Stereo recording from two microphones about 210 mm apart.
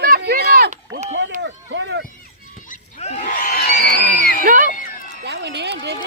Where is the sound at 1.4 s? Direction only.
55° right (ahead or behind).